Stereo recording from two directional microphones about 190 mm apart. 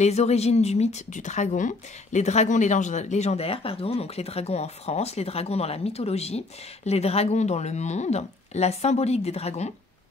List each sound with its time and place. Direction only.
0.0 s speech: 35° left (ahead or behind)